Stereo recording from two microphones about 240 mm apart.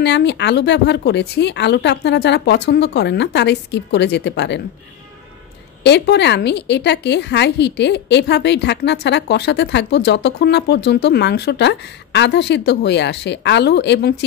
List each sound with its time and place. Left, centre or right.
0.0 s a woman's voice: left
5.9 s a woman's voice: left